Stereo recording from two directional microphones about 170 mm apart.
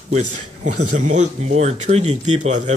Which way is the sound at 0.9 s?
45° right (ahead or behind).